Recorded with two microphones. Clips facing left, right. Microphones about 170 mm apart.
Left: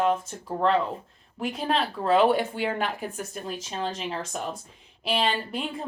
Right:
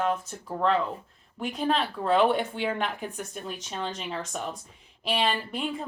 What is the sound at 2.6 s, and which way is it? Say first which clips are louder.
Speech: left 1 dB; 40° left (ahead or behind).